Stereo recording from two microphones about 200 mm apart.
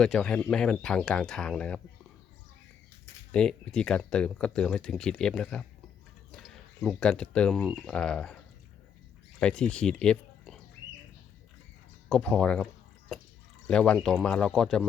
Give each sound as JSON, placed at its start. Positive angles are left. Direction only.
{"t": 0.0, "sound": "speech", "side_deg": 5}
{"t": 3.3, "sound": "speech", "side_deg": 5}
{"t": 9.4, "sound": "speech", "side_deg": 5}
{"t": 12.0, "sound": "speech", "side_deg": 5}
{"t": 13.7, "sound": "speech", "side_deg": 5}